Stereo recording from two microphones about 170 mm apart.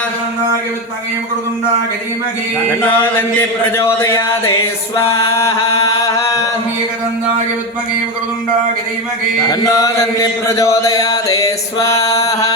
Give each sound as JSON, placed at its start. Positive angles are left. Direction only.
{"t": 2.8, "sound": "a sound", "side_deg": 10}
{"t": 5.1, "sound": "chant", "side_deg": 15}
{"t": 9.5, "sound": "chant", "side_deg": 20}